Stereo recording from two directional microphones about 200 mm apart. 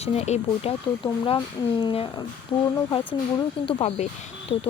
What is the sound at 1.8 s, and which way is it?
Speech, 25° left (ahead or behind).